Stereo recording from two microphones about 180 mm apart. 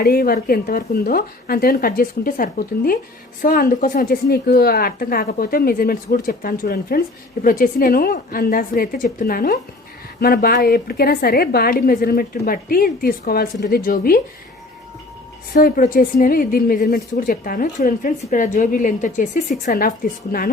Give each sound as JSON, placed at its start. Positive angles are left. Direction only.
{"t": 0.0, "sound": "a woman's voice", "side_deg": 60}
{"t": 15.5, "sound": "a woman's voice", "side_deg": 50}